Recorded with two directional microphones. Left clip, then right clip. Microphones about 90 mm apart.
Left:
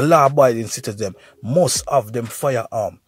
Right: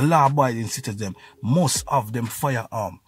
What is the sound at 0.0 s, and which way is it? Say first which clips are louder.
Speech: left 6 dB; 35° left (ahead or behind).